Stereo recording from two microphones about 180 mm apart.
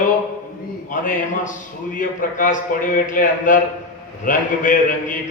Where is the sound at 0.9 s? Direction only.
45° left (ahead or behind).